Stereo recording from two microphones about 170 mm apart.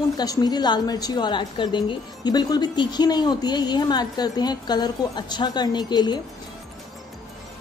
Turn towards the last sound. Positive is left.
turn(degrees=25)  # may be behind; listen again after turning